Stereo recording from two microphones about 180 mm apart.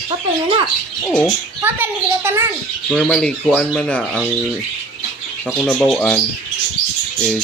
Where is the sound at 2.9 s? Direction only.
5° left (ahead or behind).